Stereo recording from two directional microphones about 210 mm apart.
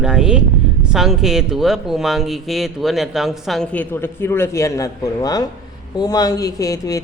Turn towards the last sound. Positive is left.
turn(degrees=15)  # may be behind; listen again after turning